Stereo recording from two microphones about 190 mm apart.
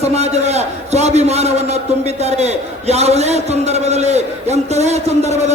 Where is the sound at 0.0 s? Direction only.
35° right (ahead or behind).